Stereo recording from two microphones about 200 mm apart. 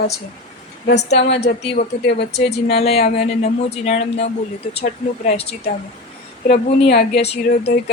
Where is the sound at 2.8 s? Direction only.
30° left (ahead or behind).